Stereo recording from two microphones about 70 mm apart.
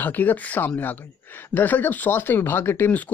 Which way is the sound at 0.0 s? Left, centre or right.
Left.